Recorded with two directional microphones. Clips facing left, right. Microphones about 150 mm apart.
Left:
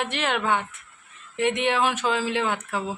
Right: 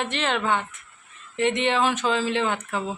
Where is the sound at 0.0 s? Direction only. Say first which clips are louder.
Even; 10° left (ahead or behind).